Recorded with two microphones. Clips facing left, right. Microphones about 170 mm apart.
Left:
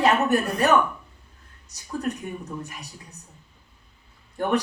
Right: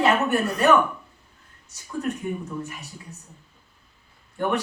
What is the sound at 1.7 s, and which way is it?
Speech, 40° left (ahead or behind).